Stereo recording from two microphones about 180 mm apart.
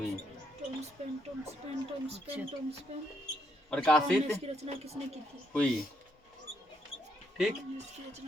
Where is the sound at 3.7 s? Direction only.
5° left (ahead or behind).